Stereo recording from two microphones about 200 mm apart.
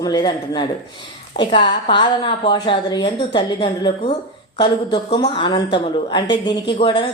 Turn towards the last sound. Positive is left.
turn(degrees=25)  # may be behind; listen again after turning